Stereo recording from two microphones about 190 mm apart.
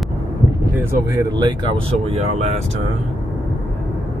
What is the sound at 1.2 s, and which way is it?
Speech, 25° right (ahead or behind).